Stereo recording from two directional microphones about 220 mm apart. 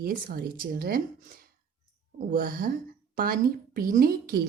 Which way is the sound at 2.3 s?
40° right (ahead or behind).